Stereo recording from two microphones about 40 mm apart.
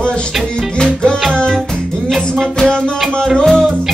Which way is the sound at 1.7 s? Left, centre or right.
Centre.